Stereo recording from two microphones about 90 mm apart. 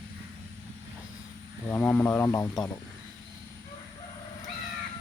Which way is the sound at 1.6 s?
20° left (ahead or behind).